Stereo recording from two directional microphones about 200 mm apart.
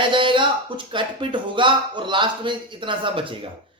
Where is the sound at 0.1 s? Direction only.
25° right (ahead or behind).